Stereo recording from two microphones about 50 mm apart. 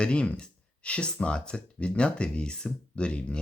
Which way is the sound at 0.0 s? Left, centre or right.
Centre.